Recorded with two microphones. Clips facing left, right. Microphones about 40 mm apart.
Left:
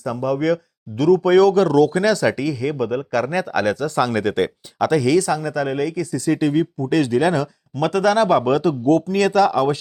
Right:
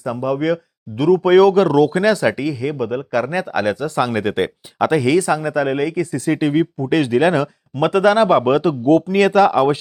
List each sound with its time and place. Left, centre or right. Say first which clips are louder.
0.0 s speech: right 1 dB; centre